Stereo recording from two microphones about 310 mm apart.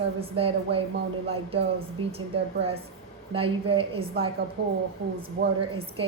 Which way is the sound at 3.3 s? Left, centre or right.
Centre.